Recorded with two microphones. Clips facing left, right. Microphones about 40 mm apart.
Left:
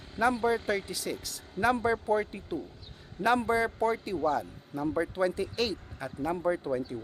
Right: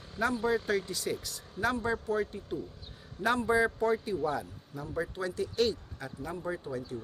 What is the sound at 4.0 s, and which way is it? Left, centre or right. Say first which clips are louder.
A man's voice: left 3 dB; centre.